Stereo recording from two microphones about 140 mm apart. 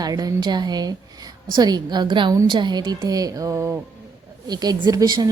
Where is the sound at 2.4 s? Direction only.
35° right (ahead or behind).